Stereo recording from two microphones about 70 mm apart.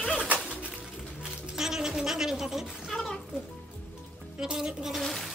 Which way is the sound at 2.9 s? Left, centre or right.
Centre.